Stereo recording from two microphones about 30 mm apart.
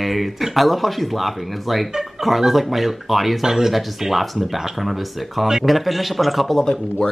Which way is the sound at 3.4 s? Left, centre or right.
Centre.